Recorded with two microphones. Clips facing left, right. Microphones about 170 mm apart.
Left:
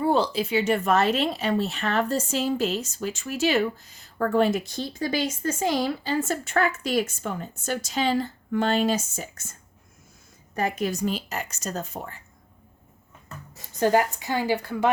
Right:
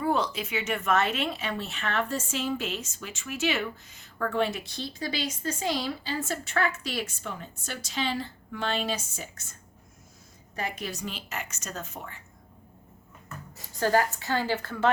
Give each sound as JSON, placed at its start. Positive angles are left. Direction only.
{"t": 0.0, "sound": "speech", "side_deg": 30}
{"t": 10.5, "sound": "a woman's voice", "side_deg": 45}
{"t": 13.7, "sound": "a woman's voice", "side_deg": 15}